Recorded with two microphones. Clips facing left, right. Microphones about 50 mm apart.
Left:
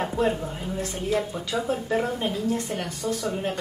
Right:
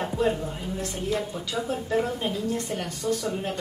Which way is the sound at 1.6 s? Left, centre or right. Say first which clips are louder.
Even; centre.